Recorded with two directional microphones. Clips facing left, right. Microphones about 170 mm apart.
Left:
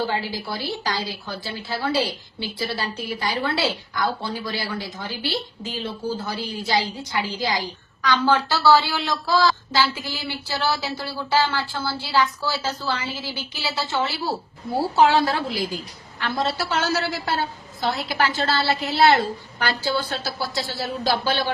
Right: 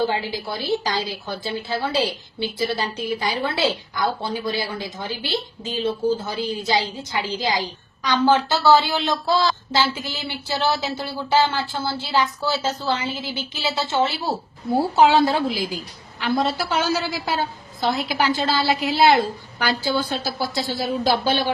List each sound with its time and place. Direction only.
0.1 s a woman's voice: 20° right (ahead or behind)